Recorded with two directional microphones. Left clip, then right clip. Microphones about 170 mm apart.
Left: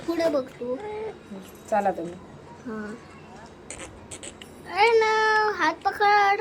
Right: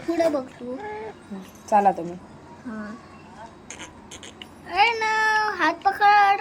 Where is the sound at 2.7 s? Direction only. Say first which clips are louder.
Left 1 dB; centre (ahead or behind).